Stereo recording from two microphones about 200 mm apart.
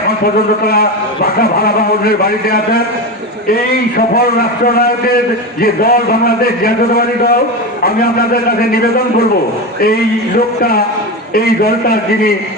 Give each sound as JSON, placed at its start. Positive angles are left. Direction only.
{"t": 0.6, "sound": "a man's voice", "side_deg": 50}
{"t": 10.6, "sound": "a man's voice", "side_deg": 50}